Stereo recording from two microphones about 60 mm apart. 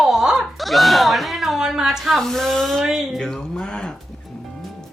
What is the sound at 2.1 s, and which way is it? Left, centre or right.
Speech, centre.